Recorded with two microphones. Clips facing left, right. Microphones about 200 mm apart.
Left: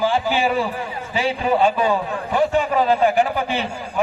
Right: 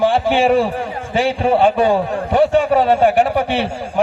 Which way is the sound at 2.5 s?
75° right (ahead or behind).